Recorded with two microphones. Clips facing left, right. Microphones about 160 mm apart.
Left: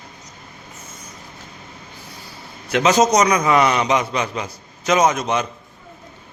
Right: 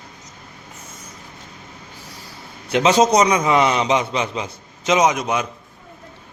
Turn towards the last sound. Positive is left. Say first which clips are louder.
# even
turn(degrees=-5)  # may be behind; listen again after turning